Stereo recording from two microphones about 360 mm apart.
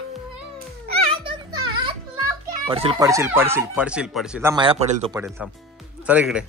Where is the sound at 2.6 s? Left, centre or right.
Centre.